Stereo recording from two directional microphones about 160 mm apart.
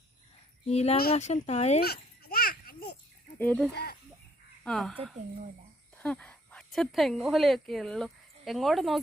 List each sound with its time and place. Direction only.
0.7 s speech: 40° left (ahead or behind)
1.8 s children playing: 75° left (ahead or behind)
3.3 s speech: 10° left (ahead or behind)
4.6 s speech: centre (ahead or behind)